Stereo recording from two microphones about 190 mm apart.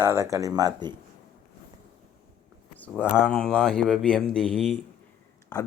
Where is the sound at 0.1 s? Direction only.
15° right (ahead or behind).